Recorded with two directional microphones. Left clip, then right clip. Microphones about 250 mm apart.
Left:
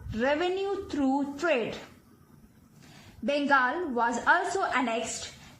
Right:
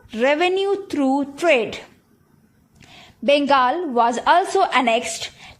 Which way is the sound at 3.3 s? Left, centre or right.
Right.